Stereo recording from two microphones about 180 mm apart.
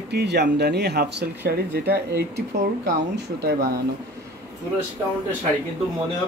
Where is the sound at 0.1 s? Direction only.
70° right (ahead or behind).